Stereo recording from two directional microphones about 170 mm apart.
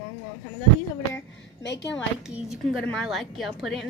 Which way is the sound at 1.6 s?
90° left.